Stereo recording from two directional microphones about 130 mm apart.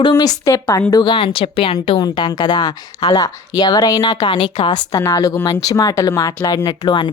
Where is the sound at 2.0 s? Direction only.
35° left (ahead or behind).